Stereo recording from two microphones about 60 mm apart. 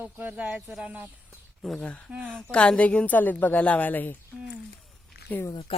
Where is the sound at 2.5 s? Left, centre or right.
Centre.